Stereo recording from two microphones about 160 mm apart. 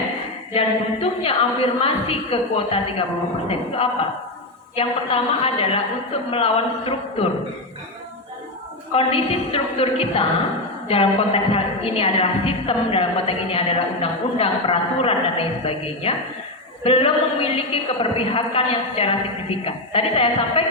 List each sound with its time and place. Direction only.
0.5 s a woman's voice: 35° left (ahead or behind)
4.7 s a woman's voice: 35° left (ahead or behind)
9.0 s a woman's voice: 35° left (ahead or behind)